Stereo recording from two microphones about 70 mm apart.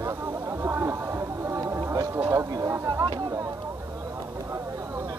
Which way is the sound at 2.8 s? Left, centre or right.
Right.